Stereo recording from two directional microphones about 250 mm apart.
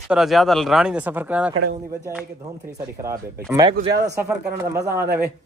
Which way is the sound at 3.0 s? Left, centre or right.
Centre.